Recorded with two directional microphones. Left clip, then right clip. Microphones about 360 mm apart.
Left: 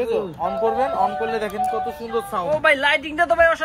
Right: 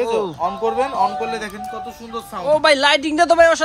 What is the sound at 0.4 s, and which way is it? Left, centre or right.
Speech, centre.